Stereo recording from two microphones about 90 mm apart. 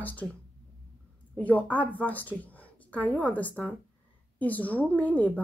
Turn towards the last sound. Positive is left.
turn(degrees=15)  # may be behind; listen again after turning